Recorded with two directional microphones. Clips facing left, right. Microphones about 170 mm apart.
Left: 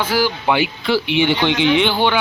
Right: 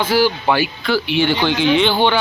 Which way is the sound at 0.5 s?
20° left (ahead or behind).